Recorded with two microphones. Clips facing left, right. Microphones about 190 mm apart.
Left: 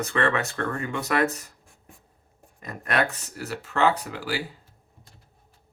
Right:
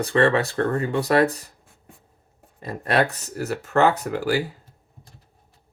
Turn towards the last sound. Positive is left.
turn(degrees=-45)  # may be behind; listen again after turning